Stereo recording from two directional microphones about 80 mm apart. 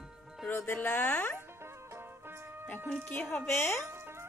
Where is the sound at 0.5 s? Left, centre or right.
Left.